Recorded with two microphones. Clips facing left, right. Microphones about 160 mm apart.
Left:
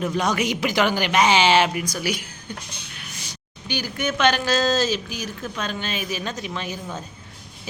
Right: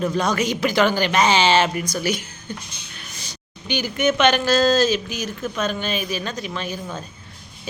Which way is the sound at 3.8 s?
15° right (ahead or behind).